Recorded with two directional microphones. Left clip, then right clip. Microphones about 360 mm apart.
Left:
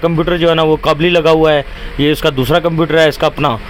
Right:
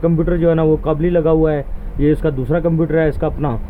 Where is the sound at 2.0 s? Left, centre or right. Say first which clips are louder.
Left 4 dB; centre.